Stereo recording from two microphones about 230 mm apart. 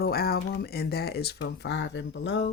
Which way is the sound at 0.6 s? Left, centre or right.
Left.